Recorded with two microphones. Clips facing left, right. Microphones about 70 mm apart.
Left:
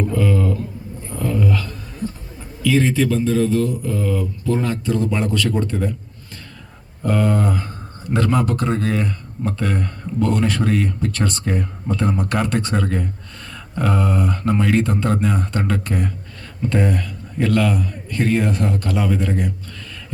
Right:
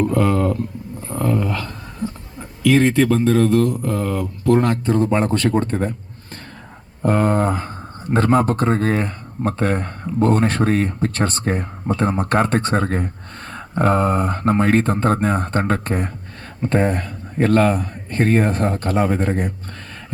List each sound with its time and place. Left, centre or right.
0.0 s a sound: right
1.1 s speech: right
2.6 s speech: right
7.0 s speech: right